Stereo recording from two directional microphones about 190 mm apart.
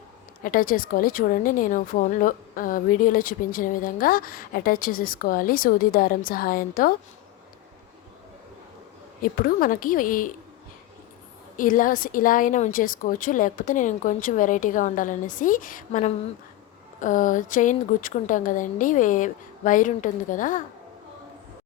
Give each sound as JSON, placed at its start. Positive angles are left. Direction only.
{"t": 0.4, "sound": "a woman's voice", "side_deg": 45}
{"t": 9.2, "sound": "a woman's voice", "side_deg": 50}
{"t": 11.5, "sound": "a woman's voice", "side_deg": 45}